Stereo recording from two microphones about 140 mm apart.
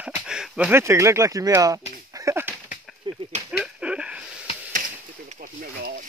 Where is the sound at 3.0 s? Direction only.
35° right (ahead or behind).